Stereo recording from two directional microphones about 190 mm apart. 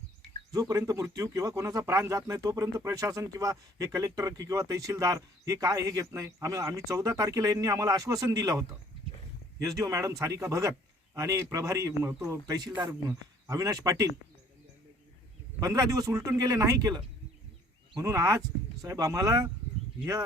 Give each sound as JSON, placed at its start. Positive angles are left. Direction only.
{"t": 0.5, "sound": "speech", "side_deg": -20}
{"t": 15.6, "sound": "speech", "side_deg": -20}